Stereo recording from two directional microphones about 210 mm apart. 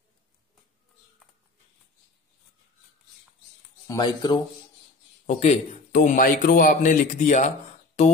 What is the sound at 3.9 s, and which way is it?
Speech, 20° left (ahead or behind).